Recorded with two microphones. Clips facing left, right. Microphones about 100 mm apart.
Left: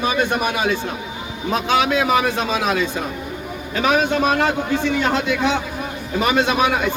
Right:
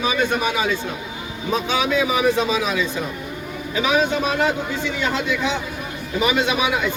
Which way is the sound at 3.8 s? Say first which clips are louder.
Left 3 dB; 60° left (ahead or behind).